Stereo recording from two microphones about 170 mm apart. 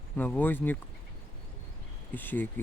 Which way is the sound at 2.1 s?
10° left (ahead or behind).